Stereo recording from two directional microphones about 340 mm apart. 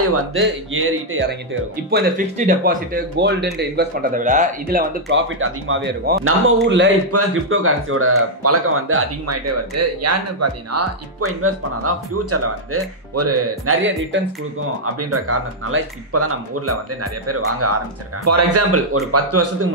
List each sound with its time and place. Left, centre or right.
0.0 s speech: right
1.9 s speech: right